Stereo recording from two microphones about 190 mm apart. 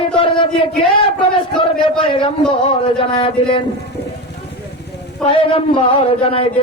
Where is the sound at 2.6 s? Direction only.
30° left (ahead or behind).